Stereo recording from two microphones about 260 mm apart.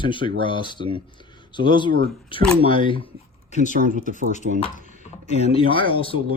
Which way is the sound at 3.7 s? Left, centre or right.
Right.